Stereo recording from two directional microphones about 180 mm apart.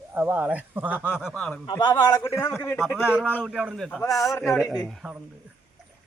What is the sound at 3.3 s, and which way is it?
Speech, 10° left (ahead or behind).